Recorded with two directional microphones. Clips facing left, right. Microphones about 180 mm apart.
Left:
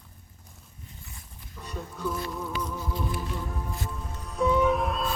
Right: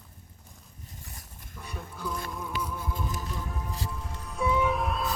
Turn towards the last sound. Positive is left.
turn(degrees=0)  # may be behind; listen again after turning